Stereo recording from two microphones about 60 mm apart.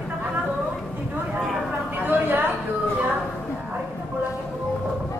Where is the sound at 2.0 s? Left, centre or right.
Right.